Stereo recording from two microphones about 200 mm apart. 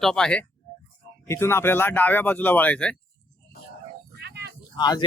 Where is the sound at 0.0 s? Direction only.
5° left (ahead or behind).